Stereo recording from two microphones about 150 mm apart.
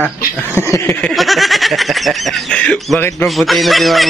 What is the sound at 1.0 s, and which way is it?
Speech, centre (ahead or behind).